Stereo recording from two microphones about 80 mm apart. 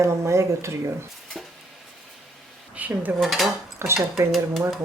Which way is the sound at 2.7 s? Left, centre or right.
Right.